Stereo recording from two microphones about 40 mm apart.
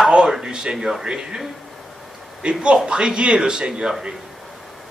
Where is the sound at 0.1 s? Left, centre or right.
Centre.